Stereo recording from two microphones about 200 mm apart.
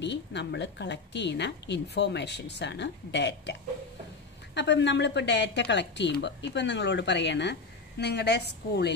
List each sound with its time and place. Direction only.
0.0 s a woman's voice: 60° left (ahead or behind)
4.6 s a woman's voice: 60° left (ahead or behind)